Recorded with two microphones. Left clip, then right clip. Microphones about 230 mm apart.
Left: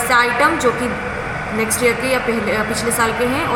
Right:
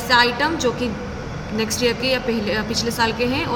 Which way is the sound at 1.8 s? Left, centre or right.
Right.